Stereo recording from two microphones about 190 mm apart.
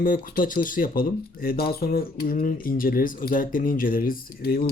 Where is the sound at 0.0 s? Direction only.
45° left (ahead or behind).